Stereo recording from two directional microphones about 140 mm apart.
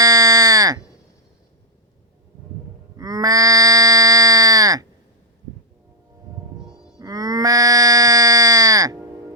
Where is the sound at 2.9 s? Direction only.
25° right (ahead or behind).